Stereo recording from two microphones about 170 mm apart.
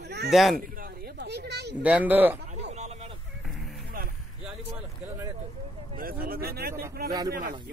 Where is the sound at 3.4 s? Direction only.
Centre (ahead or behind).